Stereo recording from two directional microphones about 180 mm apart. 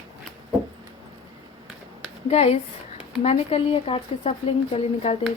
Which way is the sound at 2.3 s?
35° left (ahead or behind).